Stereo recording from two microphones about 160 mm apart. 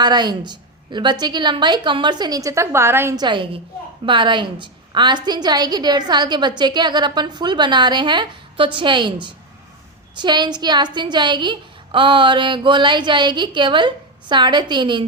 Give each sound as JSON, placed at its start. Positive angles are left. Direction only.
{"t": 0.0, "sound": "a woman's voice", "side_deg": -25}
{"t": 3.2, "sound": "a woman's voice", "side_deg": -30}
{"t": 10.2, "sound": "a woman's voice", "side_deg": -25}